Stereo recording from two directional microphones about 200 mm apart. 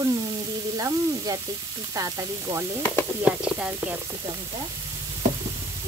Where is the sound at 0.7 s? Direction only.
15° right (ahead or behind).